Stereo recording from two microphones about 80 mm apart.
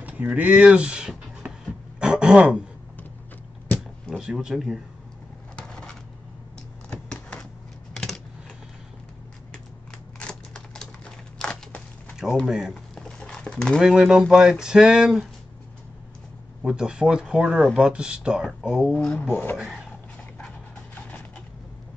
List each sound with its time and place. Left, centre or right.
0.0 s speech: centre
2.0 s throat clearing: centre
4.2 s speech: centre
5.6 s a sound: centre
7.9 s typing: centre
10.1 s a sound: centre
12.4 s speech: centre
12.9 s a sound: centre
13.7 s speech: centre
16.6 s speech: centre
18.9 s speech: centre
19.5 s speech: centre